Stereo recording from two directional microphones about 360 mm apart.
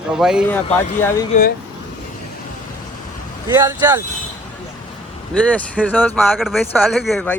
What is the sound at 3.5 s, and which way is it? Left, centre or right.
Speech, centre.